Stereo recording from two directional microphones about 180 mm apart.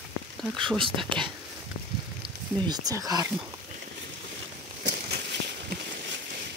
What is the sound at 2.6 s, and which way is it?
Speech, 20° right (ahead or behind).